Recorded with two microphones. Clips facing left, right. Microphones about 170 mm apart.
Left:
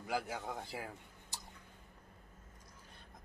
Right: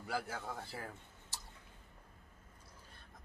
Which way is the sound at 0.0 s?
15° left (ahead or behind).